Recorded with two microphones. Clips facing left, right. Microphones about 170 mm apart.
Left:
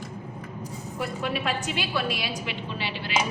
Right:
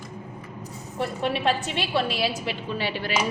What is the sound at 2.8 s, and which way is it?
Speech, 45° right (ahead or behind).